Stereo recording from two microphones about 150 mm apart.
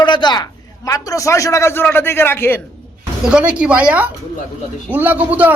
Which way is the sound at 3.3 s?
5° right (ahead or behind).